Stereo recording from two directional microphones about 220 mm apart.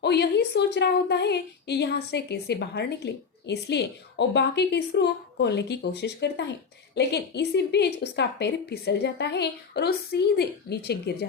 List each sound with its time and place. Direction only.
0.0 s a woman's voice: 50° left (ahead or behind)